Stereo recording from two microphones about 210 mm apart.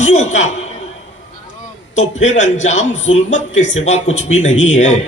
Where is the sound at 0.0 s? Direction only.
35° left (ahead or behind).